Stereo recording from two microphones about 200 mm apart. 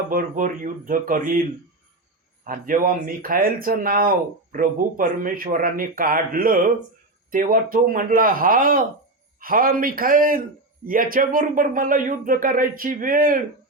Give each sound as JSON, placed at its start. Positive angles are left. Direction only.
{"t": 0.1, "sound": "speech", "side_deg": -45}
{"t": 2.4, "sound": "speech", "side_deg": -45}